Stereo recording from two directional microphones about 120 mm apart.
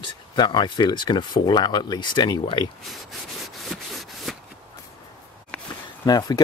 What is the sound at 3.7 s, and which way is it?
Rub, centre (ahead or behind).